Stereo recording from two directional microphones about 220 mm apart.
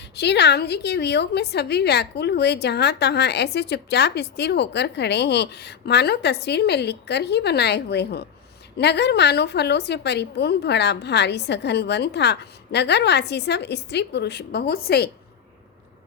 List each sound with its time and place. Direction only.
0.2 s a woman's voice: 50° left (ahead or behind)